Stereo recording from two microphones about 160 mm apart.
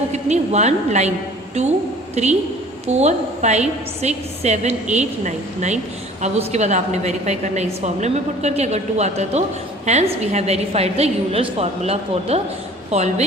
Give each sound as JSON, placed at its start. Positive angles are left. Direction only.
{"t": 0.1, "sound": "a woman's voice", "side_deg": -45}